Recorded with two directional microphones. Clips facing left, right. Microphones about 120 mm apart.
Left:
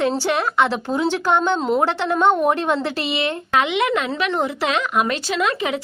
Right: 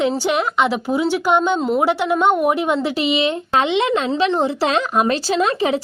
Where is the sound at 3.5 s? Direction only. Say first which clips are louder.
Right 1 dB; 30° right (ahead or behind).